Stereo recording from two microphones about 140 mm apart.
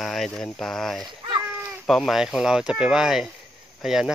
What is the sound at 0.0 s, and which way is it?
Speech, centre (ahead or behind).